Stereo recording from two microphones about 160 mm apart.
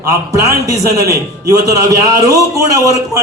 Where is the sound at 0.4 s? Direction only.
20° right (ahead or behind).